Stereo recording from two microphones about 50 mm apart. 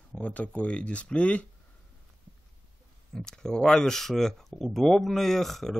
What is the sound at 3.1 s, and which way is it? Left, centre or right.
Speech, centre.